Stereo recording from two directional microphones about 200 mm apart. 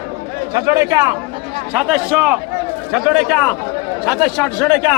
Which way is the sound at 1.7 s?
5° right (ahead or behind).